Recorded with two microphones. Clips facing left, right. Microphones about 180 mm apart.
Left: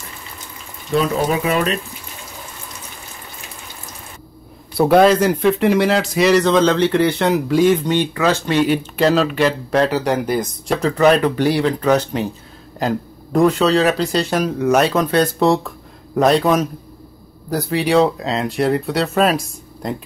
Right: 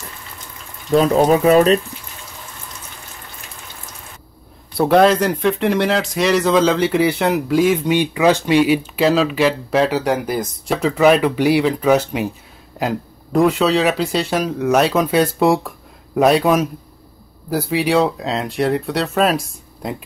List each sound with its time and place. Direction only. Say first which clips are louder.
0.9 s speech: right 5 dB; 40° right (ahead or behind)
4.7 s speech: left 1 dB; centre (ahead or behind)